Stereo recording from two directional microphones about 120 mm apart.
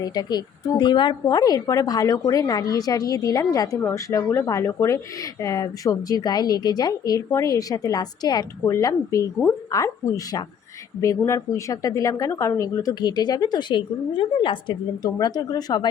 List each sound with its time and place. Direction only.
0.0 s speech: 35° left (ahead or behind)
11.0 s speech: 25° left (ahead or behind)